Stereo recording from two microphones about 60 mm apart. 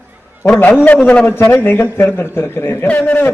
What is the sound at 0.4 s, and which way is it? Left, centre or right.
Speech, left.